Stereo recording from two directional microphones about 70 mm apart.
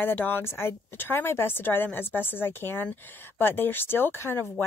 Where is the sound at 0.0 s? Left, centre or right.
Left.